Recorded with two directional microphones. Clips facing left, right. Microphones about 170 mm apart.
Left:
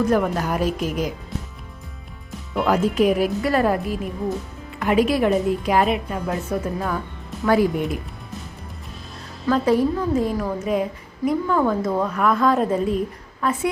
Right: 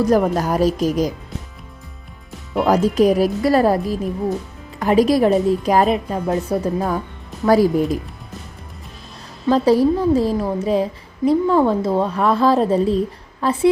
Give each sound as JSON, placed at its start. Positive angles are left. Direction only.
{"t": 0.0, "sound": "a woman's voice", "side_deg": -35}
{"t": 2.9, "sound": "a woman's voice", "side_deg": -40}
{"t": 9.5, "sound": "a woman's voice", "side_deg": -35}